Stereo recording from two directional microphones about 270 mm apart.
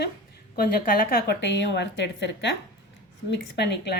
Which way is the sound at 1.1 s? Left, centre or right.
Left.